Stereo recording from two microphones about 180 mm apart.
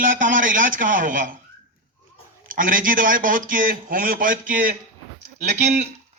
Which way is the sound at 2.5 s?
50° right (ahead or behind).